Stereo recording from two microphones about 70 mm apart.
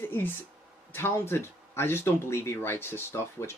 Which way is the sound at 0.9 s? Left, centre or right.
Left.